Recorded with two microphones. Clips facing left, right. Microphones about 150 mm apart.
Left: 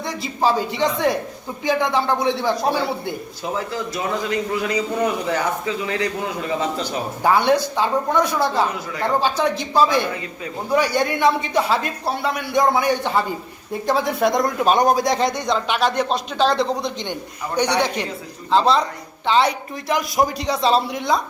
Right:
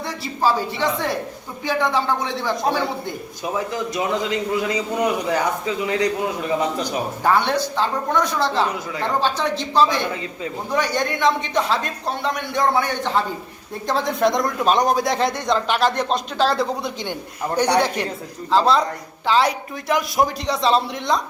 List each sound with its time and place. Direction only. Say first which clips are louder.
0.4 s a man's voice: left 1 dB; 15° left (ahead or behind)
3.4 s a man's voice: right 1 dB; 15° right (ahead or behind)
7.2 s a man's voice: left 3 dB; 10° left (ahead or behind); by 17.2 s 5° right (ahead or behind)
18.5 s speech: even; centre (ahead or behind)